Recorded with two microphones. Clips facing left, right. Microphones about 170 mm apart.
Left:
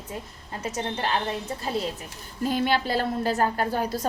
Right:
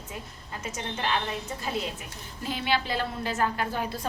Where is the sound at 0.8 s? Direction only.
35° left (ahead or behind).